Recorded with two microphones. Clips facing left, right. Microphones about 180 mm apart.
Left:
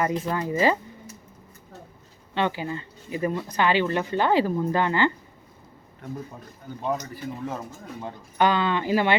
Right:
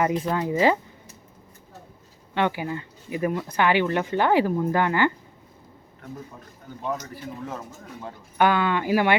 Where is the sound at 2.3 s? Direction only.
15° right (ahead or behind).